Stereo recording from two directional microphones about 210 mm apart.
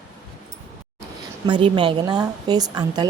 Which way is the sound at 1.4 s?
25° right (ahead or behind).